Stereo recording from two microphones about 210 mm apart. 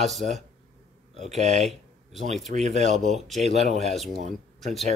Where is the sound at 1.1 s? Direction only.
30° right (ahead or behind).